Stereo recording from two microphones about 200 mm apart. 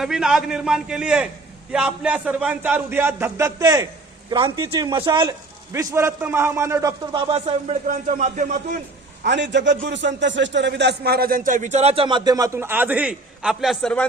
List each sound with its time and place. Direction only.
0.0 s a man's voice: centre (ahead or behind); by 5.3 s 25° right (ahead or behind)
5.7 s a man's voice: 15° right (ahead or behind); by 8.5 s 35° right (ahead or behind)
9.2 s a man's voice: 60° right (ahead or behind); by 14.1 s 5° left (ahead or behind)